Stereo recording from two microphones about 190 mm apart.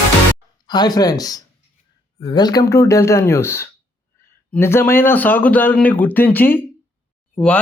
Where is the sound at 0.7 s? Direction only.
20° left (ahead or behind).